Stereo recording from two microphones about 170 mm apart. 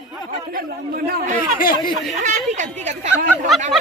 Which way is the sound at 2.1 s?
45° right (ahead or behind).